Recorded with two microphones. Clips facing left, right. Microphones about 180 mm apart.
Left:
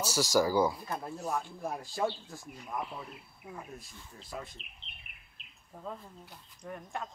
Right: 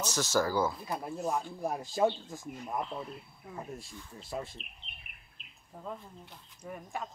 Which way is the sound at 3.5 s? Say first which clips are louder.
Right 1 dB; 10° left (ahead or behind).